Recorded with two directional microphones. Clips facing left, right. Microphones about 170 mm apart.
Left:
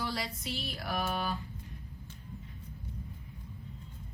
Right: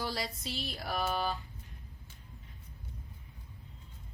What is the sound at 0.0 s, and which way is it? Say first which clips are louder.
Music: even; 35° right (ahead or behind).